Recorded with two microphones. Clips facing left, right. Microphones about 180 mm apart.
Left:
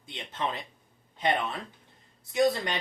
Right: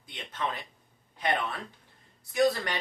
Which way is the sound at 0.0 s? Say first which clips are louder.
Left 2 dB; 25° left (ahead or behind).